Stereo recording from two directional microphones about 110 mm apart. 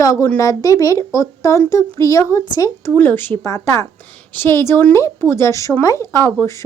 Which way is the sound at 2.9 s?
20° left (ahead or behind).